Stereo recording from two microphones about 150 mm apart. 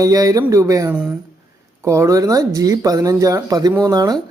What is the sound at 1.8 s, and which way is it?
Speech, 20° right (ahead or behind).